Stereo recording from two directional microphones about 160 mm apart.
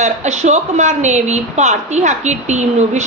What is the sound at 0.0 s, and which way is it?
A woman's voice, 45° right (ahead or behind).